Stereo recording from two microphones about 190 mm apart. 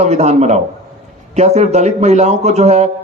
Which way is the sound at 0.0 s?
35° right (ahead or behind).